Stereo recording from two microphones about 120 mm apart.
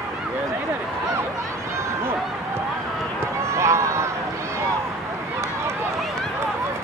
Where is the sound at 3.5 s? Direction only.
25° right (ahead or behind).